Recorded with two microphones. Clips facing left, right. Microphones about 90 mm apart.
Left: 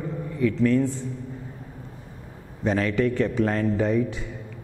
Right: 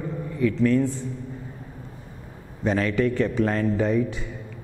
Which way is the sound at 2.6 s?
15° right (ahead or behind).